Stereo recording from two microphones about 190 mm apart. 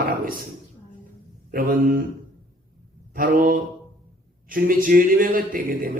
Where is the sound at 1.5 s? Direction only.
50° right (ahead or behind).